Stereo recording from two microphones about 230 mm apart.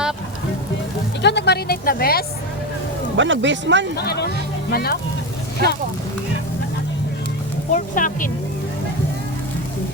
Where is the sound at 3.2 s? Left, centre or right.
Right.